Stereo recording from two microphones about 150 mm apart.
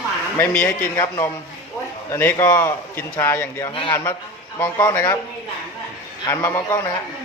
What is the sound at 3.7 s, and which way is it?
Speech, 35° left (ahead or behind).